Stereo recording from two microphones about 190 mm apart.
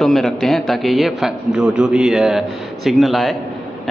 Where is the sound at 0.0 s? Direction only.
Centre (ahead or behind).